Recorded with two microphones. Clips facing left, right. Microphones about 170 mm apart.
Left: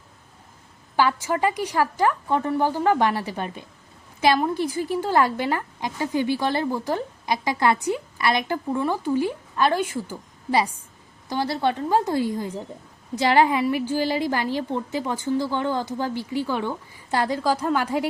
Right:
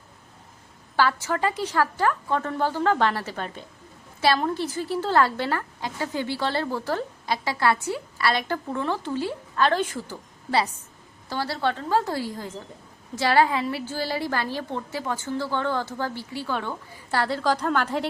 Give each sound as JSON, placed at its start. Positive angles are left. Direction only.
{"t": 0.9, "sound": "a woman's voice", "side_deg": 15}